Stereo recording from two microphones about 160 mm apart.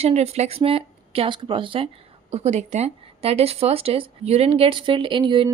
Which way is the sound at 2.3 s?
45° right (ahead or behind).